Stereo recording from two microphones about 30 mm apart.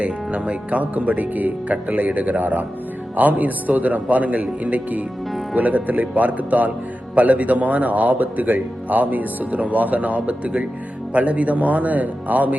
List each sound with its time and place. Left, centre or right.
0.0 s speech: right
0.7 s speech: right
11.1 s speech: right